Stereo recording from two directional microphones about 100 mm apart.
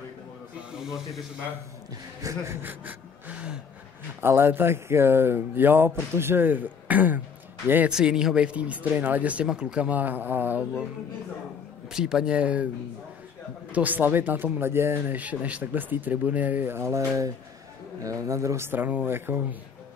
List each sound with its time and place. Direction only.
0.7 s speech: 5° right (ahead or behind)
2.2 s speech: 30° right (ahead or behind)
2.6 s gasp: 15° right (ahead or behind)
4.2 s speech: 25° right (ahead or behind)
7.9 s speech: 10° right (ahead or behind)
11.9 s speech: 5° right (ahead or behind)
13.7 s speech: 15° right (ahead or behind)